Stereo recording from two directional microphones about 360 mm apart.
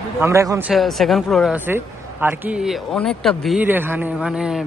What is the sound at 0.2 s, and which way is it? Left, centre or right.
Speech, centre.